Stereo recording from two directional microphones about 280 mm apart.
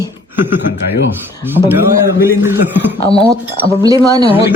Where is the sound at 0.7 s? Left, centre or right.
Left.